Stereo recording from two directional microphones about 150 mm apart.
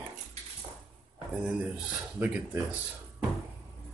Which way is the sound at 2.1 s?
10° right (ahead or behind).